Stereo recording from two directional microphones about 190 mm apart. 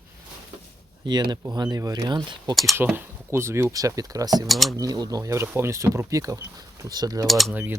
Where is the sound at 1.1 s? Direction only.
20° right (ahead or behind).